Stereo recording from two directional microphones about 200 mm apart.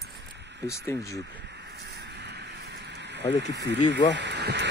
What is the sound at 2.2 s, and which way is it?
Vehicle, 55° right (ahead or behind).